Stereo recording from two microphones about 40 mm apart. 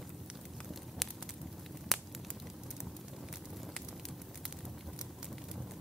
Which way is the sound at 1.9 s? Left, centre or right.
Centre.